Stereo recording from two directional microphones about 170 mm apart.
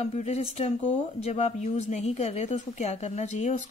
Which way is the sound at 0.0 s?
40° left (ahead or behind).